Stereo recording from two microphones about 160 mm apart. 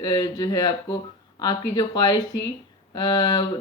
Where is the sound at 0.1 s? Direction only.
25° left (ahead or behind).